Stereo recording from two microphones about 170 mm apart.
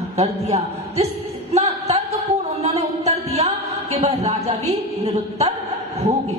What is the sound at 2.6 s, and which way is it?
Music, 40° right (ahead or behind).